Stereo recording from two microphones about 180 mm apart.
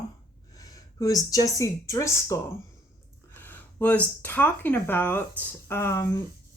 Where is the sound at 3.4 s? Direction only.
10° left (ahead or behind).